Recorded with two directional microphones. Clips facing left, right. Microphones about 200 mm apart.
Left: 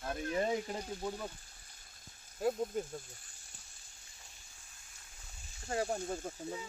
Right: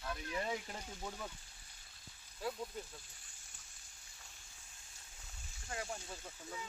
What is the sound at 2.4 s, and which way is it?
Speech, 45° left (ahead or behind).